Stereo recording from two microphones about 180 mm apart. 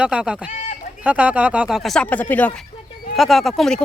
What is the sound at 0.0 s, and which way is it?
Speech, 5° right (ahead or behind).